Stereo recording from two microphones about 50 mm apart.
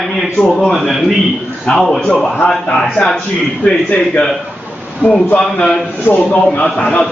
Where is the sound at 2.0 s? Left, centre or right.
Centre.